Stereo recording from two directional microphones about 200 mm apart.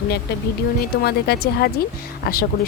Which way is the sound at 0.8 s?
55° left (ahead or behind).